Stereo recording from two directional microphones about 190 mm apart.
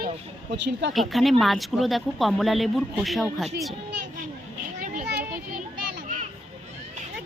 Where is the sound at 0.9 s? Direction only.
Centre (ahead or behind).